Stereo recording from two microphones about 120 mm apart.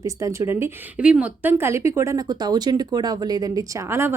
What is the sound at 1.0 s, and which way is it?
Speech, 10° right (ahead or behind).